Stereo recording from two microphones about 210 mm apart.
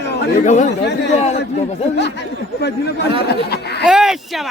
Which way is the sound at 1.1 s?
30° left (ahead or behind).